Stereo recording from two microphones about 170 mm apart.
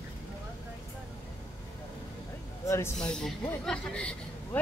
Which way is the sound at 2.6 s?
15° left (ahead or behind).